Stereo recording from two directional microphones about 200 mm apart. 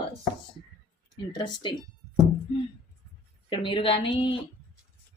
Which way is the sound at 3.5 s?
25° left (ahead or behind).